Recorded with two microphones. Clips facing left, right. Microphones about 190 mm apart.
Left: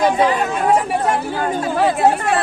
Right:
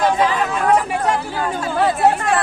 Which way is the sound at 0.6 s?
25° left (ahead or behind).